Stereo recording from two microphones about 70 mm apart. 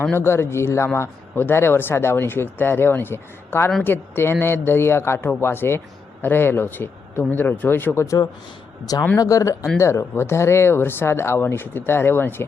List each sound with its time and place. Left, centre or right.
0.1 s speech: left
8.0 s speech: left